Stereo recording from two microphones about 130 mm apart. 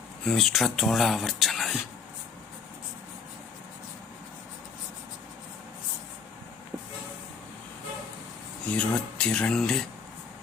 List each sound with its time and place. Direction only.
0.3 s speech: centre (ahead or behind)
8.6 s speech: 10° left (ahead or behind)